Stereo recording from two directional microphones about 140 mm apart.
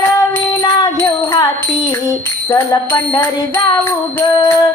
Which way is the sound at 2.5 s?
20° left (ahead or behind).